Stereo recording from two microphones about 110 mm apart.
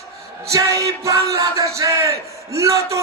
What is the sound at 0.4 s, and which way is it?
Speech, 30° right (ahead or behind).